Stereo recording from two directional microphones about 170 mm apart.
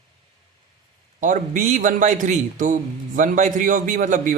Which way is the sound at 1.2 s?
45° right (ahead or behind).